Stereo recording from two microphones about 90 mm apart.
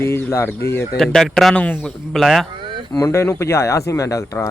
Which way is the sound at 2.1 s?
Centre (ahead or behind).